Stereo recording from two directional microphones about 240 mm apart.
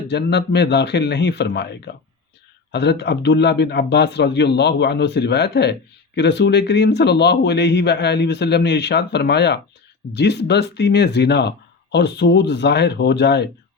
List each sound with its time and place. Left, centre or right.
0.1 s speech: left